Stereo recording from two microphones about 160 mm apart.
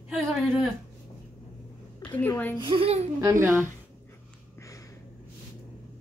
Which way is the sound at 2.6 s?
35° right (ahead or behind).